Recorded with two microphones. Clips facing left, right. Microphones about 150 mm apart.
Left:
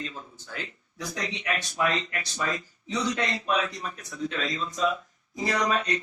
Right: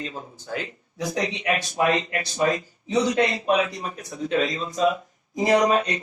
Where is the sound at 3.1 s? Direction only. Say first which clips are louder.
Right 4 dB; 60° right (ahead or behind).